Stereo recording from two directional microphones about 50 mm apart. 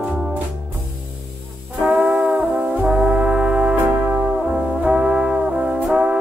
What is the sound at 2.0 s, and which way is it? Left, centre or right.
Music, centre.